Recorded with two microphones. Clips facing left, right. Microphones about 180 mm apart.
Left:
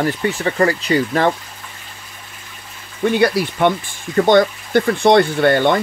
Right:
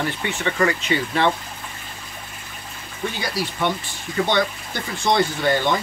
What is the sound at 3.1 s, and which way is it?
Speech, 60° left (ahead or behind).